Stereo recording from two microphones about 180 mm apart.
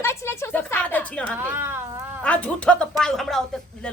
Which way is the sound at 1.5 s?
15° right (ahead or behind).